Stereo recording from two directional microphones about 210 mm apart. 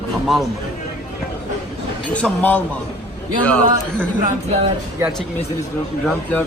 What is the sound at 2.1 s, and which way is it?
Speech, 5° left (ahead or behind).